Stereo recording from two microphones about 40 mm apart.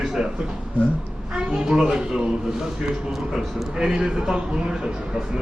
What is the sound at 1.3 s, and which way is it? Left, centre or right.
A man's voice, centre.